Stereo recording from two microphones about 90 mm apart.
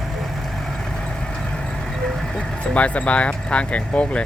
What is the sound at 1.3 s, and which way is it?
Vehicle, 5° left (ahead or behind).